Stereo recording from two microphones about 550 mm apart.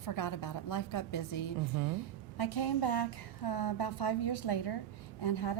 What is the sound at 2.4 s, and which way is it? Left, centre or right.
A woman's voice, left.